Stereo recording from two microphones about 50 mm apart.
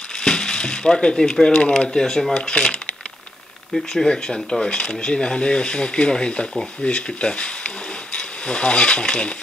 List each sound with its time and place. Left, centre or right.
0.2 s speech: centre